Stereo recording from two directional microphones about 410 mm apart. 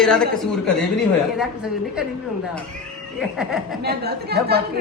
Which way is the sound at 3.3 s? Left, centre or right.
Centre.